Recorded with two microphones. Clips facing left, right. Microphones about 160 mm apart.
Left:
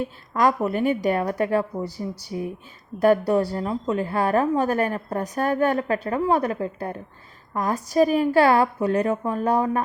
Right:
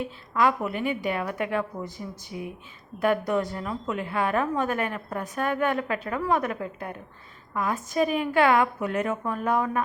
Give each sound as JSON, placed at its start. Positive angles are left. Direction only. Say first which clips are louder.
{"t": 0.0, "sound": "a woman's voice", "louder": "left 3 dB", "side_deg": 40}